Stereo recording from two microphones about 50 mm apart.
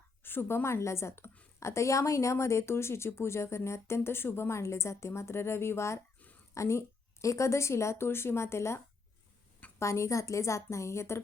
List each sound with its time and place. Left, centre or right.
0.2 s a woman's voice: left
6.5 s a woman's voice: left
9.7 s a woman's voice: left